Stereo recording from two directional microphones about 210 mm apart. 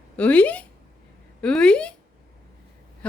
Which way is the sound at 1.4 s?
5° left (ahead or behind).